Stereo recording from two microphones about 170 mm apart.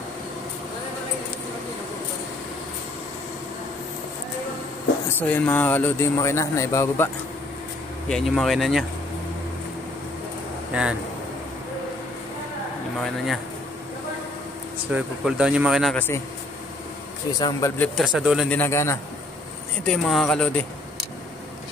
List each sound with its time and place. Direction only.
5.3 s speech: 10° left (ahead or behind)
8.1 s speech: centre (ahead or behind)
10.7 s speech: 5° right (ahead or behind)
13.0 s speech: centre (ahead or behind)
14.9 s speech: 5° right (ahead or behind)
17.4 s speech: 20° left (ahead or behind)
17.9 s speech: 5° right (ahead or behind)
18.5 s speech: 15° left (ahead or behind)
19.8 s speech: centre (ahead or behind)